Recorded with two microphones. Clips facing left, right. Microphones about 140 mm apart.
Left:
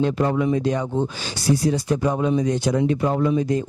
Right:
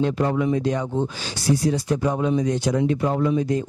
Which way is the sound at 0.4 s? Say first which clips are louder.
Left 1 dB; 20° left (ahead or behind).